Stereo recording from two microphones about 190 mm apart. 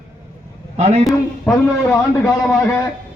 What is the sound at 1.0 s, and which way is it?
Speech, centre (ahead or behind).